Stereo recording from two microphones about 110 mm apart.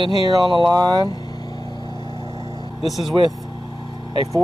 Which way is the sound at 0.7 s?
35° right (ahead or behind).